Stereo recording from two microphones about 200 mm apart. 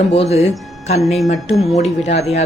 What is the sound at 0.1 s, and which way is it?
Speech, 30° left (ahead or behind).